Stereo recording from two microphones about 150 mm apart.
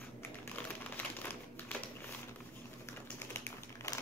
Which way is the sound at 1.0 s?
10° left (ahead or behind).